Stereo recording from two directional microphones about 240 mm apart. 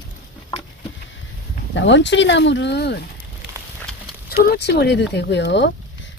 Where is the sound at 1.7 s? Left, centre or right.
Left.